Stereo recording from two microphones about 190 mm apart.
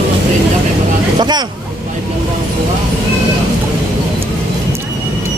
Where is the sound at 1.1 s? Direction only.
20° right (ahead or behind).